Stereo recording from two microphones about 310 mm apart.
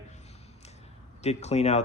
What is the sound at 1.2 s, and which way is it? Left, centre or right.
Speech, left.